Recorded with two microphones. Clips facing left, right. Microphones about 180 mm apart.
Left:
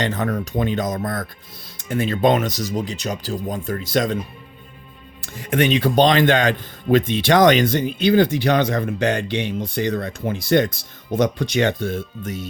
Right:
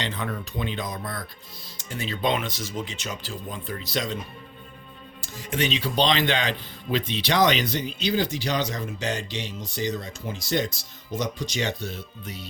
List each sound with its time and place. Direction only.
0.0 s speech: 45° left (ahead or behind)
5.2 s speech: 60° left (ahead or behind)